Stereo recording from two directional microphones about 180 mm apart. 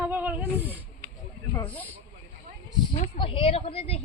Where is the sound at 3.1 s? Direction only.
30° left (ahead or behind).